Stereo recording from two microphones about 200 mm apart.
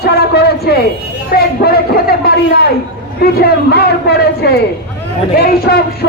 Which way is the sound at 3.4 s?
50° left (ahead or behind).